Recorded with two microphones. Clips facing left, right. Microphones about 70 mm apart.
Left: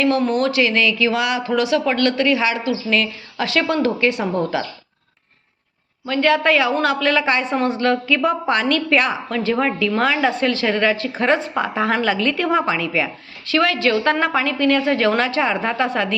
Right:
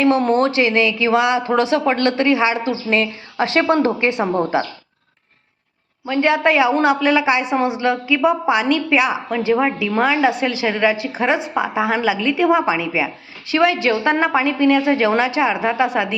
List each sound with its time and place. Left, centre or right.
0.0 s speech: right
6.1 s a woman's voice: centre